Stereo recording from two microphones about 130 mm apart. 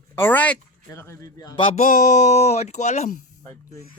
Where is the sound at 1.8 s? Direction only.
80° left; by 3.1 s 60° left (ahead or behind).